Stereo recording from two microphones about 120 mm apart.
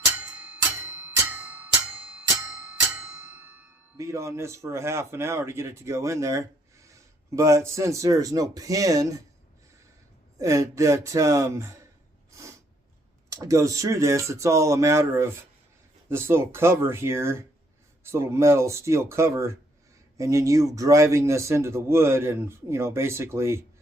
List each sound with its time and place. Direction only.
0.3 s music: 10° right (ahead or behind)
3.9 s speech: 25° right (ahead or behind)
10.3 s speech: 25° right (ahead or behind)
12.3 s a sound: 25° right (ahead or behind)
13.3 s speech: 25° right (ahead or behind)